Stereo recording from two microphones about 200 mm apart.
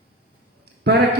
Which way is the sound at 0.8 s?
55° right (ahead or behind).